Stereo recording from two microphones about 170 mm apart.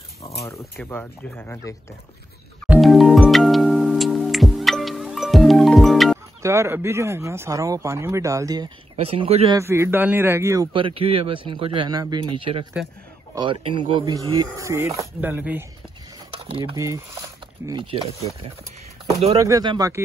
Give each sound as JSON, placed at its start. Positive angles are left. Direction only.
{"t": 0.7, "sound": "speech", "side_deg": 10}
{"t": 2.7, "sound": "music", "side_deg": 0}
{"t": 6.4, "sound": "speech", "side_deg": -15}
{"t": 8.9, "sound": "speech", "side_deg": -35}
{"t": 9.6, "sound": "speech", "side_deg": -15}
{"t": 10.7, "sound": "speech", "side_deg": -30}
{"t": 16.3, "sound": "a sound", "side_deg": -35}
{"t": 16.7, "sound": "speech", "side_deg": -20}
{"t": 17.9, "sound": "speech", "side_deg": -35}
{"t": 19.3, "sound": "speech", "side_deg": -20}